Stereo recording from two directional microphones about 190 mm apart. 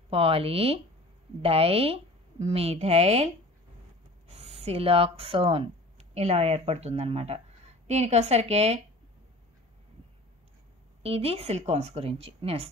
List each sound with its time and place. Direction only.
0.1 s a woman's voice: 30° right (ahead or behind)
4.3 s speech: 35° right (ahead or behind)
11.0 s a woman's voice: 30° right (ahead or behind)